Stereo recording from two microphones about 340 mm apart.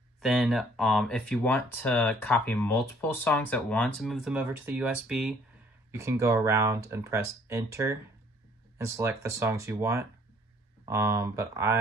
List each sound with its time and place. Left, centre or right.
0.2 s speech: centre